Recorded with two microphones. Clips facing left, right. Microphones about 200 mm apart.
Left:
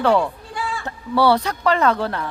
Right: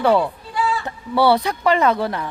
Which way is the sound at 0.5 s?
50° left (ahead or behind).